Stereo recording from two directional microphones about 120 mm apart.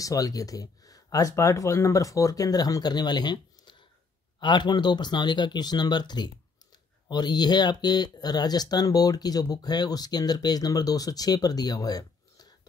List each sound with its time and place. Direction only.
0.0 s speech: 30° left (ahead or behind)